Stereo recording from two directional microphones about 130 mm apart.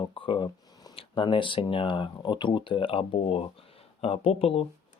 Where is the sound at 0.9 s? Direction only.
40° left (ahead or behind).